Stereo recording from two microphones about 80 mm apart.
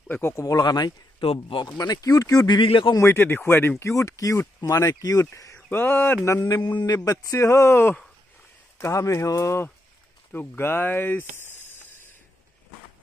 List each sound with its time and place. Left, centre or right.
0.1 s speech: left
0.5 s speech: left
1.5 s speech: left
2.5 s speech: left
3.0 s speech: left
3.8 s speech: left
10.3 s speech: left